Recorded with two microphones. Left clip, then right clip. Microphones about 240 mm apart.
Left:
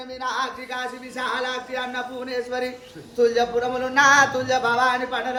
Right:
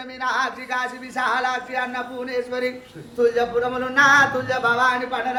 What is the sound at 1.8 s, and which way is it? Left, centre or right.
Speech, centre.